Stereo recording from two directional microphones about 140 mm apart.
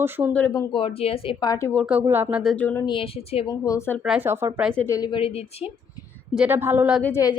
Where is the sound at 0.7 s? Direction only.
40° left (ahead or behind).